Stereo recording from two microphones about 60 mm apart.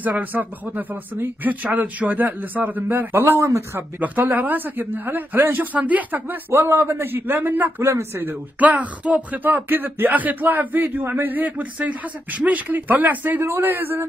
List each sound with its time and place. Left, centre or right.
0.0 s a man's voice: right
4.0 s a man's voice: right
6.5 s a man's voice: right
7.8 s speech: right
8.2 s speech: right
9.7 s a man's voice: right